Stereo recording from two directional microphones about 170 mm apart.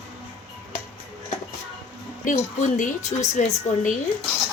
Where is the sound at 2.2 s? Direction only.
45° left (ahead or behind).